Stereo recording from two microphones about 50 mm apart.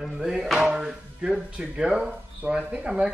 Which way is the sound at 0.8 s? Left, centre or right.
Centre.